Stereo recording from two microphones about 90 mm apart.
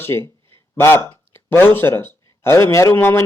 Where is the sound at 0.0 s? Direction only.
25° left (ahead or behind).